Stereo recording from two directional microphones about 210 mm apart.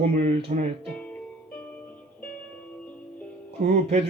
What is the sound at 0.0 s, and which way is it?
Speech, 30° right (ahead or behind).